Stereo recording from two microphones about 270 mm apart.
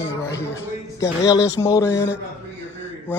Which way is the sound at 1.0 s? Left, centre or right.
Centre.